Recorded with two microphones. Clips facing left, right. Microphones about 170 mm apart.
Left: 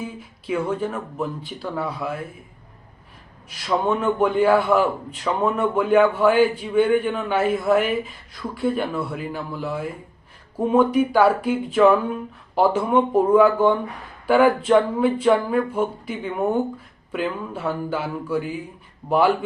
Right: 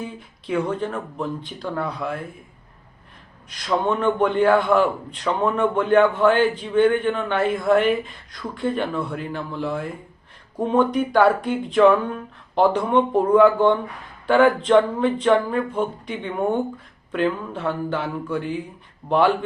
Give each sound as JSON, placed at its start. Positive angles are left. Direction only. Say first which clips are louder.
{"t": 0.0, "sound": "speech", "louder": "even", "side_deg": 5}
{"t": 3.5, "sound": "a man's voice", "louder": "even", "side_deg": 5}